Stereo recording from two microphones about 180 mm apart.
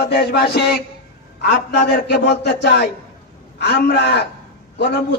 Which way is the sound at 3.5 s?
65° left (ahead or behind).